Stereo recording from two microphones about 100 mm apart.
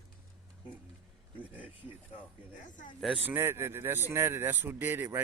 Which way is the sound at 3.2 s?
20° right (ahead or behind).